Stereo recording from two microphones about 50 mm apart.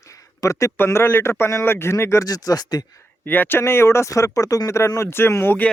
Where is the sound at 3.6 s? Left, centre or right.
Left.